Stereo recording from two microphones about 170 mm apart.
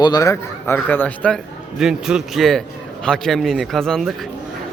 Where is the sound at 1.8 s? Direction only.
5° right (ahead or behind).